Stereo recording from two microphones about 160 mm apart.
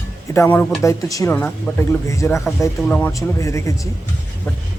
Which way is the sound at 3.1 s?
20° left (ahead or behind).